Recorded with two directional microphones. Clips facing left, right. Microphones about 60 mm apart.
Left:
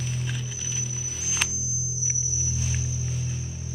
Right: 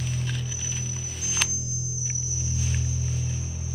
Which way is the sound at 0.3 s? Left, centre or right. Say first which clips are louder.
Right 1 dB; centre.